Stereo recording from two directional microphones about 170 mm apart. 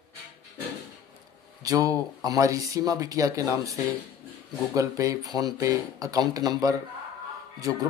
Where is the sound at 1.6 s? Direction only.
20° right (ahead or behind).